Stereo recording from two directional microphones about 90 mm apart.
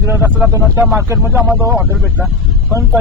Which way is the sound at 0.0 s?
30° right (ahead or behind).